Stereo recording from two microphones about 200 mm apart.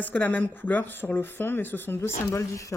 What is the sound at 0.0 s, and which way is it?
A woman's voice, 10° left (ahead or behind).